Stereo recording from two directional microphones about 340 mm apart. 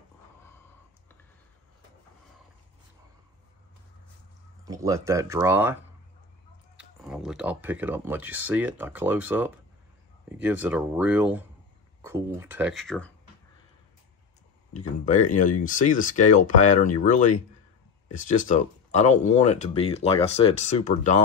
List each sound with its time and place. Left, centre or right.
4.6 s speech: centre
6.8 s speech: centre
15.0 s speech: left